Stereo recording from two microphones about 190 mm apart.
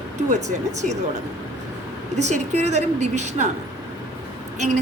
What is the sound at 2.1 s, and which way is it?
A woman's voice, 35° right (ahead or behind).